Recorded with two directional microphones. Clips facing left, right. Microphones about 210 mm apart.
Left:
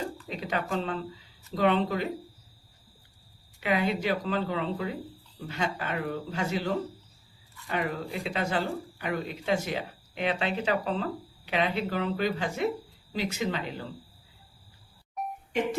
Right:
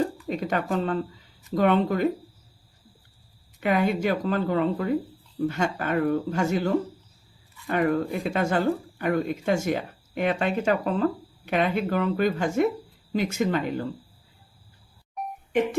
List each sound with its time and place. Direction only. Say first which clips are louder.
0.3 s speech: right 5 dB; 45° right (ahead or behind)
3.6 s speech: right 4 dB; 50° right (ahead or behind)